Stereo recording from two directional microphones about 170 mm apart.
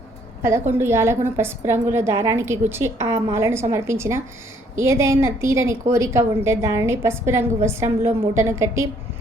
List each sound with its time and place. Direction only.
0.7 s a woman's voice: 15° right (ahead or behind)